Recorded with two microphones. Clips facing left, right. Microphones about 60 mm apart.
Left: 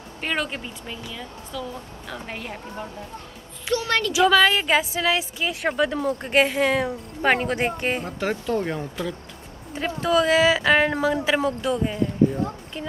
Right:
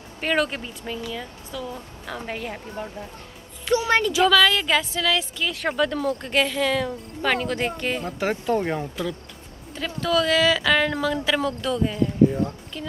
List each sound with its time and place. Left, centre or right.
0.2 s speech: centre
3.7 s speech: right
4.1 s a woman's voice: centre
6.3 s a woman's voice: left
8.2 s speech: centre
8.5 s speech: centre
9.8 s a woman's voice: left